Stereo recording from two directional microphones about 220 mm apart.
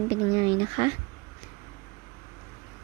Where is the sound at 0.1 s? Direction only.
20° right (ahead or behind).